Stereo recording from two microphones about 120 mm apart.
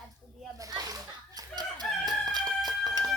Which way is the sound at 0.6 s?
30° right (ahead or behind).